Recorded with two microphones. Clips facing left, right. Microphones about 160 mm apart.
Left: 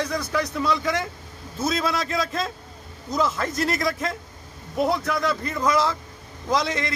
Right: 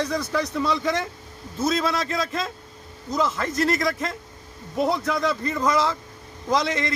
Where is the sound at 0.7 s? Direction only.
25° right (ahead or behind).